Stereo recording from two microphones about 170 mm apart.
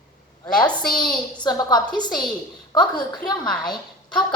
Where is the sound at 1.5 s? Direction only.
25° left (ahead or behind).